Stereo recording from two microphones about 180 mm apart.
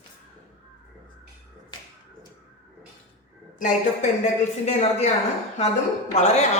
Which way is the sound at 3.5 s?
45° left (ahead or behind).